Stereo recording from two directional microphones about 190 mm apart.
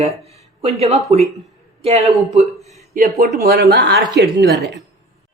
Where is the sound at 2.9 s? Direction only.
50° right (ahead or behind).